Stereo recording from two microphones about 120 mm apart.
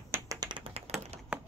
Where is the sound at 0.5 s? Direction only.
50° right (ahead or behind).